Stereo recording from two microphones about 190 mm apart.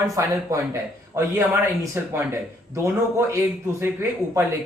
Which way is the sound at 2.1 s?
15° right (ahead or behind).